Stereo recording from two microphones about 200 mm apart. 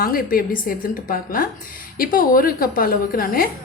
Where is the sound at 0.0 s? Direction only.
45° left (ahead or behind).